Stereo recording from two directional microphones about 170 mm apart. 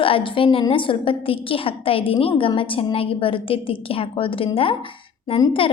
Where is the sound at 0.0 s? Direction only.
30° left (ahead or behind).